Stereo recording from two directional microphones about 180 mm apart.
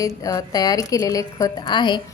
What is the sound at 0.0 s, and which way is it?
A woman's voice, 20° left (ahead or behind).